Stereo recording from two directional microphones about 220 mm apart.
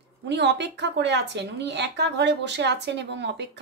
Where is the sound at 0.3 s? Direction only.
50° right (ahead or behind).